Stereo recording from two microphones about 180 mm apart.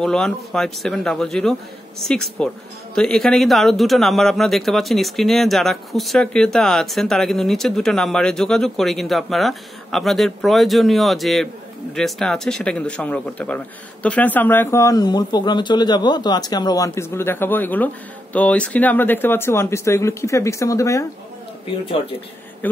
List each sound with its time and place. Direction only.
0.0 s speech: 5° left (ahead or behind)